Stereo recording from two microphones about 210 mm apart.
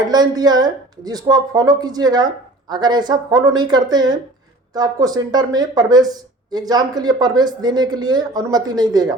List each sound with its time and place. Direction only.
0.0 s speech: 20° right (ahead or behind)